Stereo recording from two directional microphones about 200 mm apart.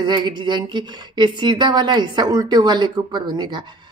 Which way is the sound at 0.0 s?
20° right (ahead or behind).